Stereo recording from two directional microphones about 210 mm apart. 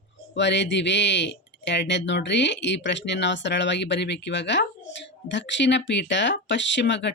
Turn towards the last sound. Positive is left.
turn(degrees=60)  # may be behind; listen again after turning